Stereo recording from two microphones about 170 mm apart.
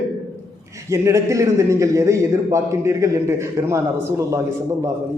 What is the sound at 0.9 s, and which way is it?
A man's voice, 15° right (ahead or behind).